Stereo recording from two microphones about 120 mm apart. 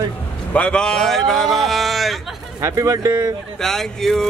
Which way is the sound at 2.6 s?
25° right (ahead or behind).